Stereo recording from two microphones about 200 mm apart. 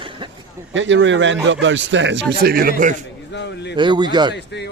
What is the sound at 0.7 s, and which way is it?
A man's voice, 70° right (ahead or behind).